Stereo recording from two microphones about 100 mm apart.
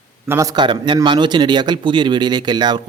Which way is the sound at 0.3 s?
30° right (ahead or behind).